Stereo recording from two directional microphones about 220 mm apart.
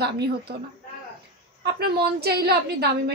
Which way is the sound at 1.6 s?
45° right (ahead or behind).